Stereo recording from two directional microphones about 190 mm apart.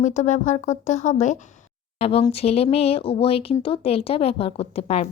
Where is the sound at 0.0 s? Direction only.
40° left (ahead or behind).